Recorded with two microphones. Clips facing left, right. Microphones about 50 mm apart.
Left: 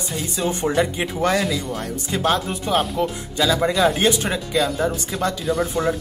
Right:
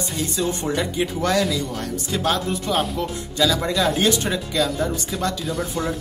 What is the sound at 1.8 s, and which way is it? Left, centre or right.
Speech, left.